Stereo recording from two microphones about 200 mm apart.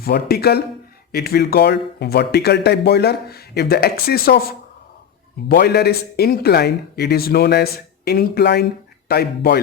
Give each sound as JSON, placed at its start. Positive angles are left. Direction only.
{"t": 0.0, "sound": "speech", "side_deg": 50}